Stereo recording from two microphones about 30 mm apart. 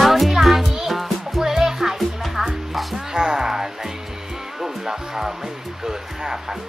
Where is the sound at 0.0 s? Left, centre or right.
Centre.